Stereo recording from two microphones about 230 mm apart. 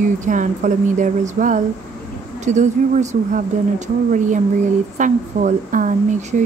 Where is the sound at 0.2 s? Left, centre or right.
Right.